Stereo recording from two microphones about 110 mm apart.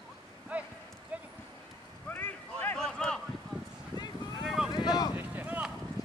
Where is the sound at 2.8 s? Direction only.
5° left (ahead or behind).